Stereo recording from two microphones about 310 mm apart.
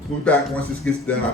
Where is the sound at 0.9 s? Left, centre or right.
Centre.